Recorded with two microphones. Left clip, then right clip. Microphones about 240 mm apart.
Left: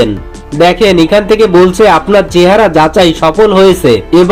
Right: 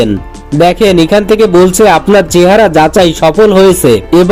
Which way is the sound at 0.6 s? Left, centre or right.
Right.